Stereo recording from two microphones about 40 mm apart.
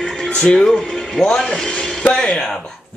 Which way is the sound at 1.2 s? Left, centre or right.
Centre.